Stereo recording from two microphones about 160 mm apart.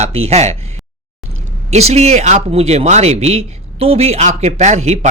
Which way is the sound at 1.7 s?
45° right (ahead or behind).